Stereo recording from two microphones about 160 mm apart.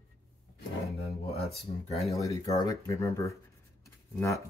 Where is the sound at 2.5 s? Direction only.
20° left (ahead or behind).